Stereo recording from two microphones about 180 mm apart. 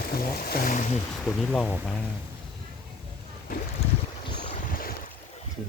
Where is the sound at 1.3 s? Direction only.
5° left (ahead or behind).